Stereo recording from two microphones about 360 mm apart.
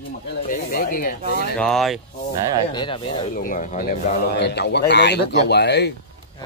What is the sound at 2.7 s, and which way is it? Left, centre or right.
Speech, centre.